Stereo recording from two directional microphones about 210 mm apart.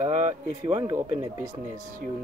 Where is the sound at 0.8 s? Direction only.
15° right (ahead or behind).